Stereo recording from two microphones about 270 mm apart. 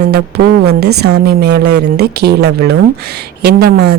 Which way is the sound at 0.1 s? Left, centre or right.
Right.